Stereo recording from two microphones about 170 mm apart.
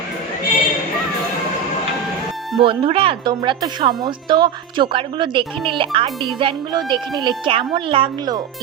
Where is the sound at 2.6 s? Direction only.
30° right (ahead or behind).